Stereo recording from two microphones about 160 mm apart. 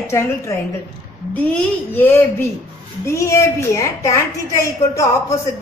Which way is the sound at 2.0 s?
15° left (ahead or behind).